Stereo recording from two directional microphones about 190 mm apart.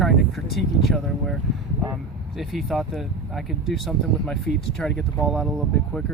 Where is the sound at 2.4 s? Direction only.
Centre (ahead or behind).